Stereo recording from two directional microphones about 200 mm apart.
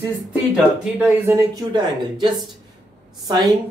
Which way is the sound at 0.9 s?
10° right (ahead or behind).